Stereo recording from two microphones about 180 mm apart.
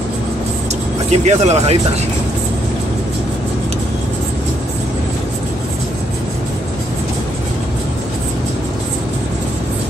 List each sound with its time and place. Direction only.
1.1 s speech: 40° right (ahead or behind)